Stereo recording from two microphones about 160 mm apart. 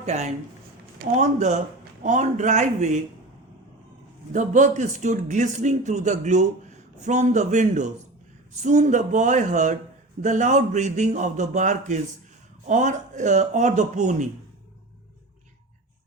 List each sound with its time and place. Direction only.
0.0 s a man's voice: 45° right (ahead or behind)
4.3 s a man's voice: 50° right (ahead or behind)